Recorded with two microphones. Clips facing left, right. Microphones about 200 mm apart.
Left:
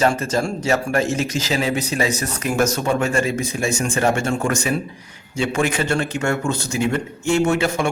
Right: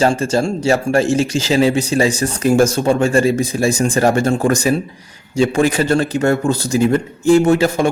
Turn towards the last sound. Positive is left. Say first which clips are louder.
# right 6 dB
turn(degrees=-35)  # may be behind; listen again after turning